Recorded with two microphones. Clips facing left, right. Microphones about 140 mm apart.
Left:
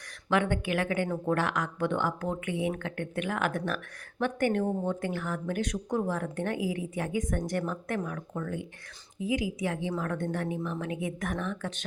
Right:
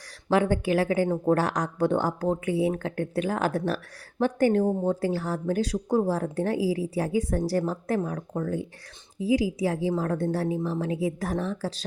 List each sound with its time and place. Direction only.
0.3 s speech: 35° right (ahead or behind)